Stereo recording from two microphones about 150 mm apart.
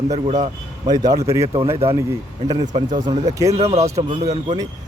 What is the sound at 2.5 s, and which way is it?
Speech, 30° right (ahead or behind).